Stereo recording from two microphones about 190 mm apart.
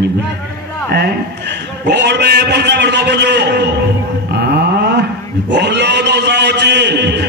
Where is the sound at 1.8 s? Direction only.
60° right (ahead or behind).